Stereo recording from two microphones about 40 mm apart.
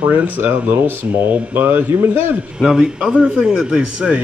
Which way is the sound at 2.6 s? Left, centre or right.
Centre.